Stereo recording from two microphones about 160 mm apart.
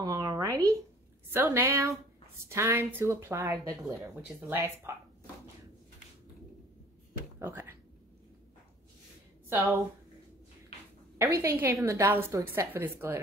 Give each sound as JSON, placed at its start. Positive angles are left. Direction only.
{"t": 0.0, "sound": "a sound", "side_deg": -20}
{"t": 1.3, "sound": "a woman's voice", "side_deg": -15}
{"t": 3.8, "sound": "speech", "side_deg": 0}
{"t": 4.5, "sound": "a woman's voice", "side_deg": -15}
{"t": 7.3, "sound": "speech", "side_deg": -15}
{"t": 11.1, "sound": "a woman's voice", "side_deg": -20}